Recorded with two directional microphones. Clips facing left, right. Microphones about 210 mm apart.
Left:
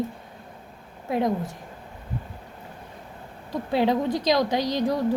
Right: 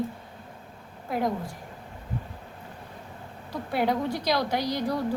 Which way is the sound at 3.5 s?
20° left (ahead or behind).